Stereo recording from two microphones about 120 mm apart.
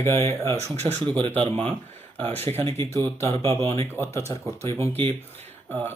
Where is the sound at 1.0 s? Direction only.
50° right (ahead or behind).